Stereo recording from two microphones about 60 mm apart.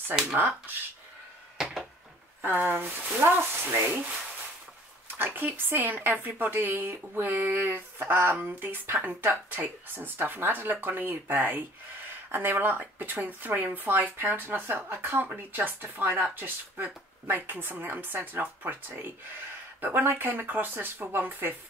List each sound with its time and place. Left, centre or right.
1.6 s a sound: centre
2.4 s speech: right
5.0 s speech: right